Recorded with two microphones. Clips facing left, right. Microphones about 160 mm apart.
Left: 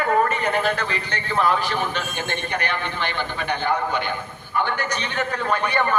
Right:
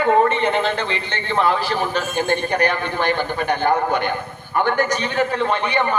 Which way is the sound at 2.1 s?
45° right (ahead or behind).